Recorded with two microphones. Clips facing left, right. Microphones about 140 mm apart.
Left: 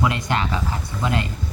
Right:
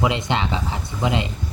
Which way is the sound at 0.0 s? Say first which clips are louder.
Right 1 dB; 20° right (ahead or behind).